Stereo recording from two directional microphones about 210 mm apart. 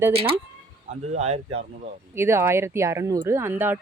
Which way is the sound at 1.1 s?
30° right (ahead or behind).